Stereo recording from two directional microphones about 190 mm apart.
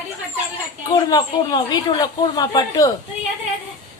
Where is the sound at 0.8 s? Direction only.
20° left (ahead or behind).